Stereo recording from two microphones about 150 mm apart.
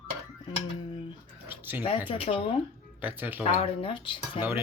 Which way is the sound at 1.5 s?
15° right (ahead or behind).